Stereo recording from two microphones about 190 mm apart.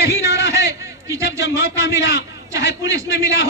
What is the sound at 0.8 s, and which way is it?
A man's voice, 15° right (ahead or behind).